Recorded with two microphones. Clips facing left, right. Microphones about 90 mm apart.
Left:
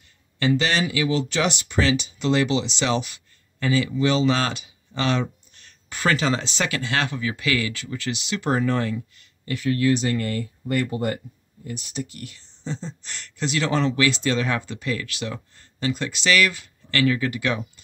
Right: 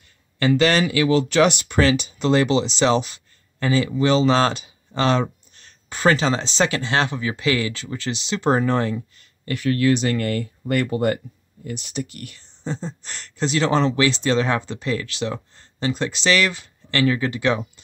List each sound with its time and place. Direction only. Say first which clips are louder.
0.4 s speech: right 4 dB; 55° right (ahead or behind); by 9.3 s 35° right (ahead or behind)
9.5 s speech: right 2 dB; 65° right (ahead or behind); by 17.6 s 30° right (ahead or behind)